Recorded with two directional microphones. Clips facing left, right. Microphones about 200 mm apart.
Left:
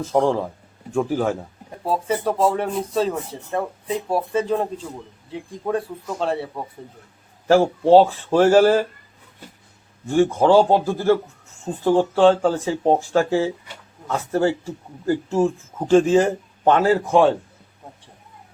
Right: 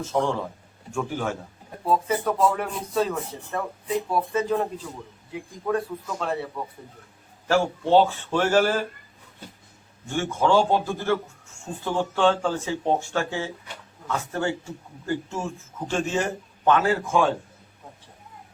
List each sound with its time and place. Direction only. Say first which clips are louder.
0.0 s speech: left 6 dB; 35° left (ahead or behind)
10.2 s speech: left 6 dB; 35° left (ahead or behind)